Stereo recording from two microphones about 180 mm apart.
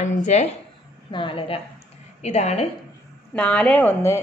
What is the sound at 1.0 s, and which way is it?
A woman's voice, 30° left (ahead or behind).